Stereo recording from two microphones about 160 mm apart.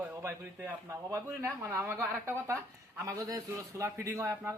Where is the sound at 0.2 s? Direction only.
15° right (ahead or behind).